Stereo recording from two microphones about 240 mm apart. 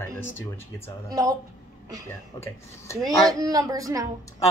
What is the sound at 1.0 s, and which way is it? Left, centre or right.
Speech, centre.